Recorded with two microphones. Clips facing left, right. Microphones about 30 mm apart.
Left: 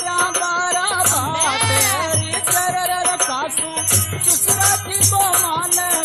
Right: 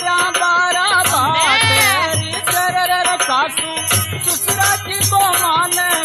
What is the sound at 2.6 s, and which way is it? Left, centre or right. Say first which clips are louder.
Music: right 5 dB; right.